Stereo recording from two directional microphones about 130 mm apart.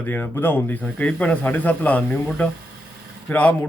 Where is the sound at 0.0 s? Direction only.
15° left (ahead or behind).